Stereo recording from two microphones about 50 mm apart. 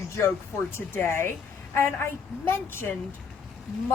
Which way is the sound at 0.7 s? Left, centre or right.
Left.